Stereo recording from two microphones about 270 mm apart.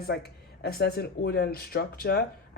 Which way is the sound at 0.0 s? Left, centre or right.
Left.